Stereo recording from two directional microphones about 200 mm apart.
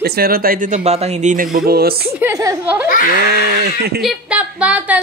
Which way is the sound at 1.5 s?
50° right (ahead or behind).